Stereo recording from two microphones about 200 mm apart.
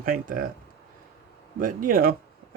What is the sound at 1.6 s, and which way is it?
Speech, 45° right (ahead or behind).